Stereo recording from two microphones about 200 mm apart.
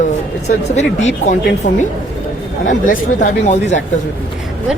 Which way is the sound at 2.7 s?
40° left (ahead or behind).